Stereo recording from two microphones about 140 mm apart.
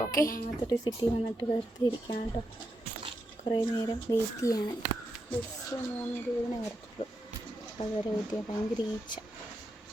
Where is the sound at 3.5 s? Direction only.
30° left (ahead or behind).